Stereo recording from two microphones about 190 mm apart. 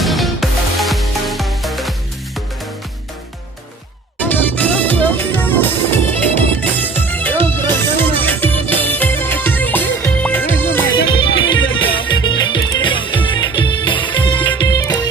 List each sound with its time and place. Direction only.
0.0 s music: centre (ahead or behind)
4.2 s music: 10° left (ahead or behind)
10.9 s music: 25° left (ahead or behind)